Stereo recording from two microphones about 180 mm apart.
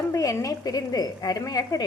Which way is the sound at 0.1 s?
15° left (ahead or behind).